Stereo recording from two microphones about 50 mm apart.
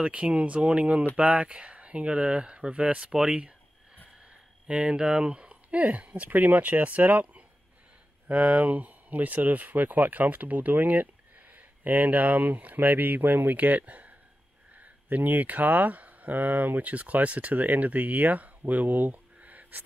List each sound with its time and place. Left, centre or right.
0.0 s speech: right
3.0 s a sound: centre
4.3 s speech: right